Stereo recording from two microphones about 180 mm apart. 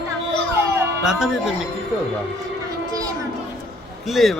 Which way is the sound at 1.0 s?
5° right (ahead or behind).